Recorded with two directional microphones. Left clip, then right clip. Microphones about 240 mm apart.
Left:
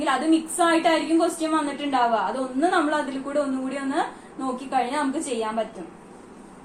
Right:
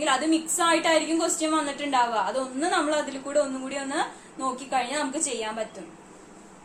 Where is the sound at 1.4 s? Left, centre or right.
Centre.